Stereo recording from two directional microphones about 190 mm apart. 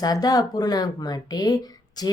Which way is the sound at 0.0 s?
20° left (ahead or behind).